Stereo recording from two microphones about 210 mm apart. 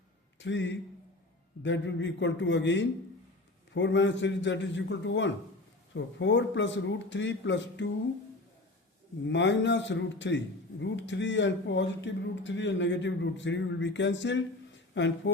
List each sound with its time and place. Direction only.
0.3 s a man's voice: 60° left (ahead or behind)
9.2 s a man's voice: 60° left (ahead or behind)